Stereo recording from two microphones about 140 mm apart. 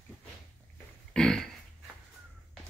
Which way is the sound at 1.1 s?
5° left (ahead or behind).